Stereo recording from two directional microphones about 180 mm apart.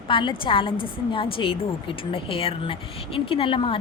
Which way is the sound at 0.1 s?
25° left (ahead or behind).